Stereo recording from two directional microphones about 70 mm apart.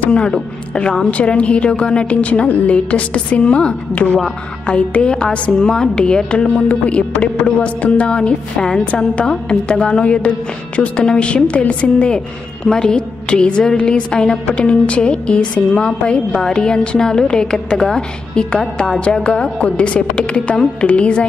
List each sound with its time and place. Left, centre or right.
0.0 s a woman's voice: centre